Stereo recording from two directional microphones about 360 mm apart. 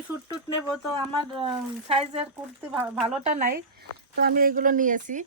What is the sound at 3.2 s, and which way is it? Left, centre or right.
Speech, right.